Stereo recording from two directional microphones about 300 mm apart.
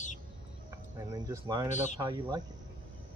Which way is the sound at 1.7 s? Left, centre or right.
Left.